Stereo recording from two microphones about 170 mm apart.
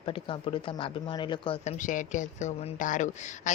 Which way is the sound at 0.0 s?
30° left (ahead or behind).